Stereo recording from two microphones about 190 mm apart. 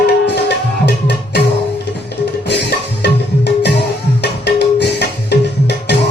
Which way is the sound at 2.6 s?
60° left (ahead or behind).